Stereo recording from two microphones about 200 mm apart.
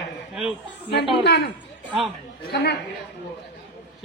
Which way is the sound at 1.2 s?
55° left (ahead or behind).